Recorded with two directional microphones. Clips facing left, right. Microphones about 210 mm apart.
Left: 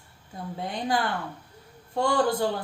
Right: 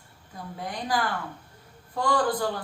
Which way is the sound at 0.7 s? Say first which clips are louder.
Left 1 dB; 25° left (ahead or behind).